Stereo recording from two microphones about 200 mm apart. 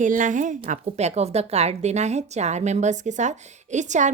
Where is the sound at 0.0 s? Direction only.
40° right (ahead or behind).